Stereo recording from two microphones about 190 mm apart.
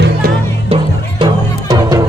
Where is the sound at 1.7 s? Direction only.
20° right (ahead or behind).